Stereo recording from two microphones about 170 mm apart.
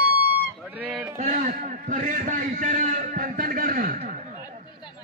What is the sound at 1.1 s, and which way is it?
A man's voice, 45° right (ahead or behind).